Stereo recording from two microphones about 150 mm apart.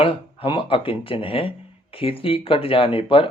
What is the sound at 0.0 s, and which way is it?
Speech, 35° left (ahead or behind).